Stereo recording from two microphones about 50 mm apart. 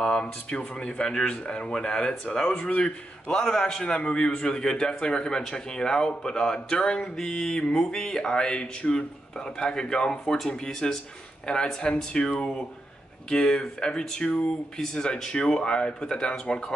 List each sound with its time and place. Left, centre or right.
0.0 s a man's voice: centre